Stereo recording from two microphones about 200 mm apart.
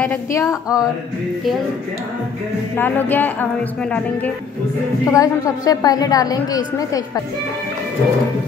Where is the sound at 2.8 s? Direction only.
10° left (ahead or behind).